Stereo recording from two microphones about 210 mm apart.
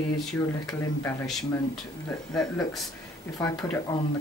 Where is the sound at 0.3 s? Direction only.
Centre (ahead or behind).